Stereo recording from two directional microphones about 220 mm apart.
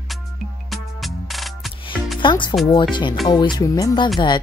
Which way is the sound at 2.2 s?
20° left (ahead or behind).